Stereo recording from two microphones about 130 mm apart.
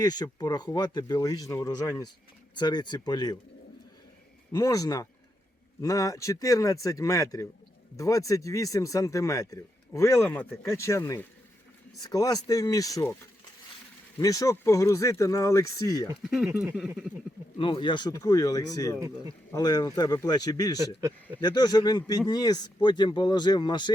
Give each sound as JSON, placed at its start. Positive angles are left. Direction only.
{"t": 0.0, "sound": "speech", "side_deg": 30}
{"t": 4.5, "sound": "speech", "side_deg": 25}
{"t": 14.2, "sound": "speech", "side_deg": 25}
{"t": 16.2, "sound": "speech", "side_deg": -5}
{"t": 17.6, "sound": "speech", "side_deg": 40}
{"t": 18.9, "sound": "speech", "side_deg": -25}
{"t": 19.5, "sound": "speech", "side_deg": 30}